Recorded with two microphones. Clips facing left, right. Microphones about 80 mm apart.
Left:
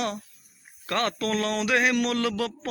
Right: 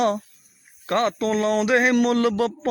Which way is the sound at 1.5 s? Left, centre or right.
Right.